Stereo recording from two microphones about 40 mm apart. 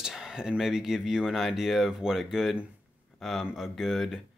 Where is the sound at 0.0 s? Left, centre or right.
Centre.